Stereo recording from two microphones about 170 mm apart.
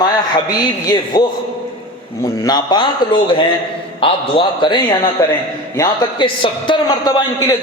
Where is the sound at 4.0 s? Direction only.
30° left (ahead or behind).